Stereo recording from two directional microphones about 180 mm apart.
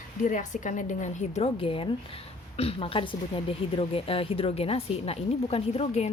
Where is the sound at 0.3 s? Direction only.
45° left (ahead or behind).